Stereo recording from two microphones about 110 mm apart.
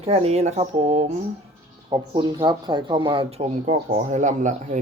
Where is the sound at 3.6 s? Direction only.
90° right.